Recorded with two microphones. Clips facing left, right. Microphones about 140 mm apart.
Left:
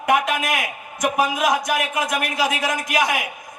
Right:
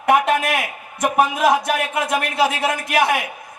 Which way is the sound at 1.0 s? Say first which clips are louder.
Right 3 dB; 30° right (ahead or behind).